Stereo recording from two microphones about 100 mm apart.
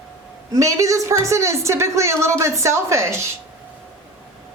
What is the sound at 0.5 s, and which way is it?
A woman's voice, 35° right (ahead or behind).